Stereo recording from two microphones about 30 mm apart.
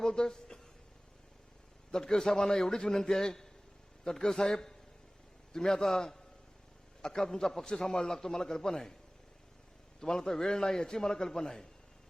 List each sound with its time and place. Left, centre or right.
0.0 s speech: left
1.9 s a man's voice: left
10.0 s a man's voice: left